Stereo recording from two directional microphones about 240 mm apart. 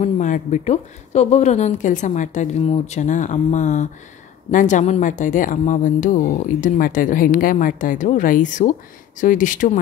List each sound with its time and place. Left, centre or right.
0.0 s speech: left